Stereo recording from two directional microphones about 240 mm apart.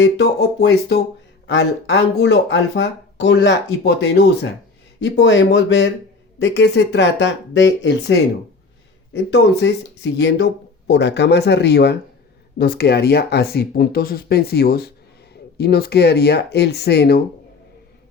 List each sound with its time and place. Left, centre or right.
0.0 s speech: left
9.1 s speech: left